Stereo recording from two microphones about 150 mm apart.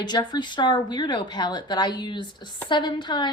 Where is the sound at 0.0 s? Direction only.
30° left (ahead or behind).